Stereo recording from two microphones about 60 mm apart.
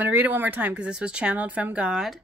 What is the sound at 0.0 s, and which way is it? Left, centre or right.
Speech, right.